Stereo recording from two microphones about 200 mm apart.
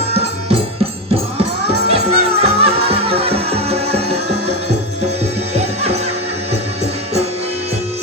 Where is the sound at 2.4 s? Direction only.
30° right (ahead or behind).